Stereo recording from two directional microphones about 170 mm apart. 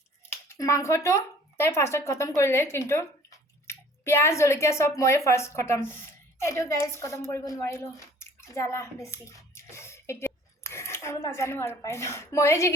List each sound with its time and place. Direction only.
0.3 s a woman's voice: 15° left (ahead or behind)